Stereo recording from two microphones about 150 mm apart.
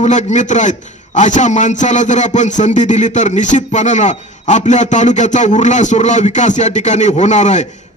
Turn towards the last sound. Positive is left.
turn(degrees=50)  # may be behind; listen again after turning